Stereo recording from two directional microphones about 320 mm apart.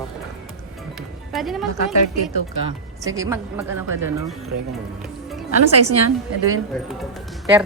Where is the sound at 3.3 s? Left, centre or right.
Centre.